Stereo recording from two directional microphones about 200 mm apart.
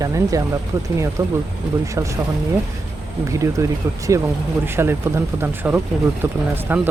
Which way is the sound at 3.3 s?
15° right (ahead or behind).